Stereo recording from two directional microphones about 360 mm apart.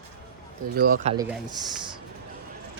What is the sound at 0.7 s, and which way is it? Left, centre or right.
Speech, right.